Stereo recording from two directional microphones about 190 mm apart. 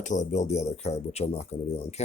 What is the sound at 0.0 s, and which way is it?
Speech, 40° left (ahead or behind).